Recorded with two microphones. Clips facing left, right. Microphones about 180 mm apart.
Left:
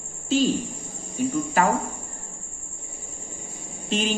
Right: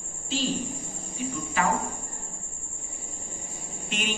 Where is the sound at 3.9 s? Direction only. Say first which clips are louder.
Left 8 dB; 35° left (ahead or behind).